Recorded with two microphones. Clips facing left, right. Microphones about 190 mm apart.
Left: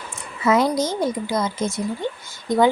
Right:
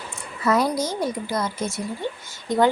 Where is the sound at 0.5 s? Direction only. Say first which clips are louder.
Left 3 dB; 20° left (ahead or behind).